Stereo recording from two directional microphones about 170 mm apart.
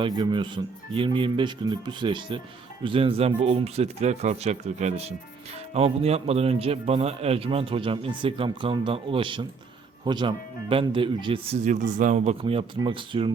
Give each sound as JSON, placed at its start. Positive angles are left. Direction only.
{"t": 0.0, "sound": "a man's voice", "side_deg": -25}
{"t": 11.6, "sound": "a man's voice", "side_deg": -45}